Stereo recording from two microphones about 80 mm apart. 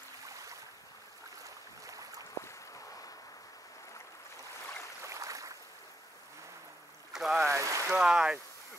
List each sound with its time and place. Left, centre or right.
0.3 s boat: right
5.0 s a sound: right
7.1 s boat: centre
7.4 s boat: right
7.9 s speech: centre